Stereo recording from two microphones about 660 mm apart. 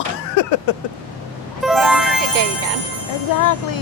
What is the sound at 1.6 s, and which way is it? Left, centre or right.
Music, centre.